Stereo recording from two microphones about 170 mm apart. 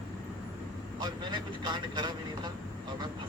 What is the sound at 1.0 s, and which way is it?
Speech, 25° right (ahead or behind).